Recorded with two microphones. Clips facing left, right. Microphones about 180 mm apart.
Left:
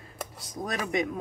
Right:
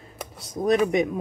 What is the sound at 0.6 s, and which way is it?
Speech, 25° right (ahead or behind).